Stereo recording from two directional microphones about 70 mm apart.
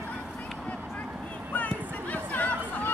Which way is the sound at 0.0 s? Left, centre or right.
Left.